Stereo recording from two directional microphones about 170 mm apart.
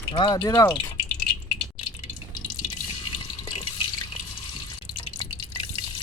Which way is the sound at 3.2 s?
35° left (ahead or behind).